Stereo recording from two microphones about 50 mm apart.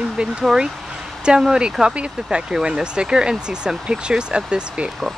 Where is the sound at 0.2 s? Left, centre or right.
Centre.